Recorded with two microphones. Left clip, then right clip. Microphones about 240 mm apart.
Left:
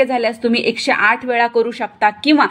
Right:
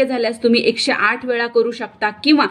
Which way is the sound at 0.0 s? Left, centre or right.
Left.